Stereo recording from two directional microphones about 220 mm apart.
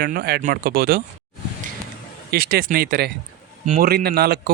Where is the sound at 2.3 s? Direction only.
45° right (ahead or behind).